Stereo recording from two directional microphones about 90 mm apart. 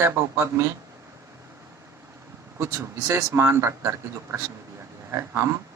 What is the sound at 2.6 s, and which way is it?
Speech, 30° right (ahead or behind).